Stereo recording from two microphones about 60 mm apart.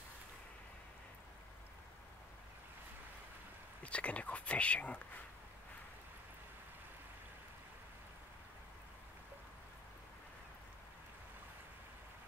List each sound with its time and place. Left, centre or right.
3.8 s speech: left